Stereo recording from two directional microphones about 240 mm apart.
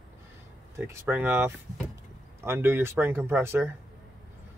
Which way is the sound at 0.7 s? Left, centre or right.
Centre.